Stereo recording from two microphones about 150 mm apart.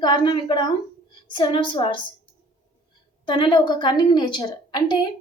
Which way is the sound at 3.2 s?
30° left (ahead or behind).